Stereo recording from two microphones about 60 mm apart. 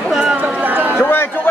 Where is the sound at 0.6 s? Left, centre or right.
Right.